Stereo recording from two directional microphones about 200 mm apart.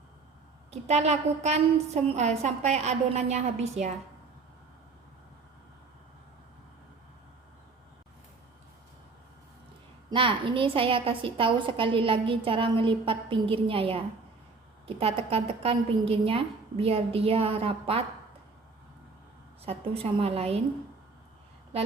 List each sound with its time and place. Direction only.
0.7 s a woman's voice: 30° right (ahead or behind)
10.1 s a woman's voice: 25° right (ahead or behind)
19.6 s a woman's voice: 30° right (ahead or behind)